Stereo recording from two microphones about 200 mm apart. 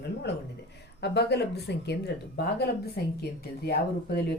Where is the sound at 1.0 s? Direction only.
55° left (ahead or behind).